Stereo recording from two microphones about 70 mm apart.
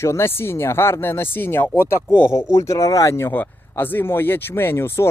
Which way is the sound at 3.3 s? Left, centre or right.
Left.